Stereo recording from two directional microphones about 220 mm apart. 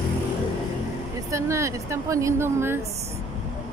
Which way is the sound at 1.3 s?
15° right (ahead or behind).